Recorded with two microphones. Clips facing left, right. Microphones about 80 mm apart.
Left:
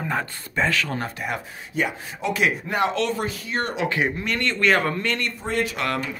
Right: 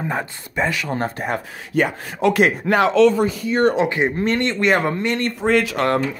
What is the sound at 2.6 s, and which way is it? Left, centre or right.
Speech, right.